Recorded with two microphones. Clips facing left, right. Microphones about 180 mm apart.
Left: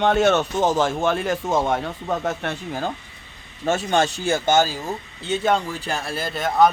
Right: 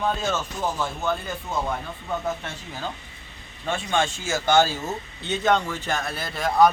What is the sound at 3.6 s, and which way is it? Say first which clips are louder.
Speech: left 5 dB; 40° left (ahead or behind).